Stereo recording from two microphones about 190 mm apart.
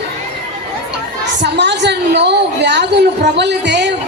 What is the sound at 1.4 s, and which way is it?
A woman's voice, 65° right (ahead or behind).